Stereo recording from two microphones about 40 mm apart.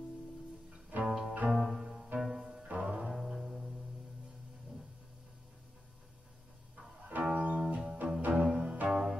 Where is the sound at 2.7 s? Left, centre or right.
Right.